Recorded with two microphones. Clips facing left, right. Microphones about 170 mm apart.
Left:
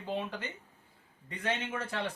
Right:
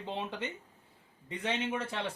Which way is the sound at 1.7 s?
25° right (ahead or behind).